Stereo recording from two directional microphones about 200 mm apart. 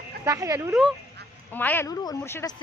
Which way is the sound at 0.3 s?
15° right (ahead or behind).